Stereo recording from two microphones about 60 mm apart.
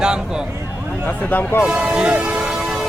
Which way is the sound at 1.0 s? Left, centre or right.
Left.